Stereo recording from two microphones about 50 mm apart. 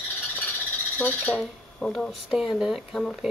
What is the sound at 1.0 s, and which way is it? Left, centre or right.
Squawk, left.